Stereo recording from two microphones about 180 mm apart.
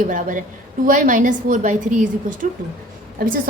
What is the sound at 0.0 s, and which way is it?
A woman's voice, 45° right (ahead or behind).